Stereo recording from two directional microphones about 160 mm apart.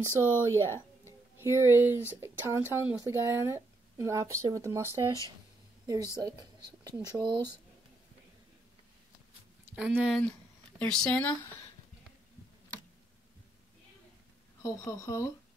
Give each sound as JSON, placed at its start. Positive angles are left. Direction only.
{"t": 0.0, "sound": "speech", "side_deg": -15}
{"t": 1.0, "sound": "a sound", "side_deg": -15}
{"t": 2.0, "sound": "speech", "side_deg": -15}
{"t": 9.8, "sound": "speech", "side_deg": -5}
{"t": 10.8, "sound": "speech", "side_deg": 10}
{"t": 14.6, "sound": "speech", "side_deg": 20}